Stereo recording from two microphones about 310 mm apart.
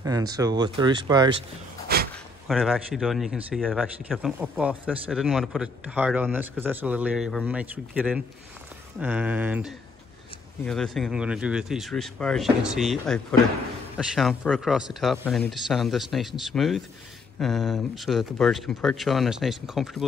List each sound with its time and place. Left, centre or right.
0.0 s speech: centre
1.9 s a sound: right
2.4 s speech: centre